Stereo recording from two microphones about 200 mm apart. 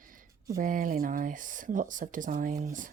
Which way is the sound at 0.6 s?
45° right (ahead or behind).